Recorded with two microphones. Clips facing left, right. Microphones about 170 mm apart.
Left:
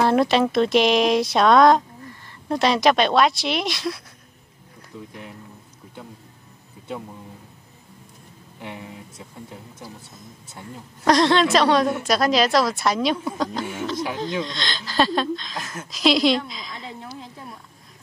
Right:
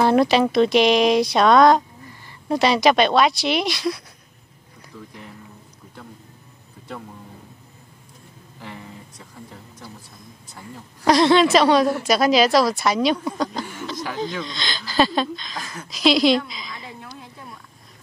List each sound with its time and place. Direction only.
0.0 s speech: centre (ahead or behind)
4.9 s speech: 20° left (ahead or behind)
8.5 s a sound: 15° left (ahead or behind)
11.1 s speech: 5° right (ahead or behind)